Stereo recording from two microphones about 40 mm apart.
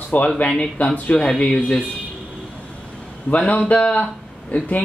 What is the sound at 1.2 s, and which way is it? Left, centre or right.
Speech, centre.